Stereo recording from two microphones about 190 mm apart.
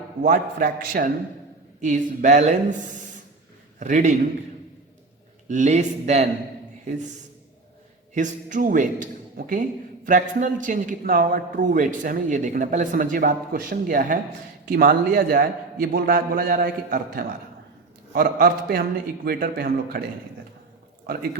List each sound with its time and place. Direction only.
0.2 s a man's voice: 45° right (ahead or behind)
3.8 s speech: 40° right (ahead or behind)
5.5 s speech: 40° right (ahead or behind)
8.1 s a man's voice: 40° right (ahead or behind)